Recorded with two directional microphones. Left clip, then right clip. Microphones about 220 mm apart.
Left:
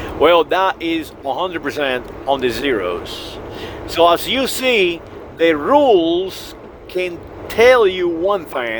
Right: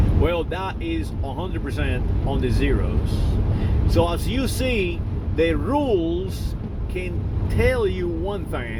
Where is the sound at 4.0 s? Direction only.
40° left (ahead or behind).